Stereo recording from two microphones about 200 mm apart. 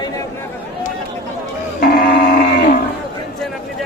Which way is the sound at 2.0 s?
45° left (ahead or behind).